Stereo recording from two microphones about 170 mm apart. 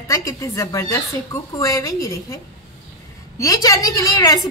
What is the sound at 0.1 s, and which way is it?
A woman's voice, 20° left (ahead or behind).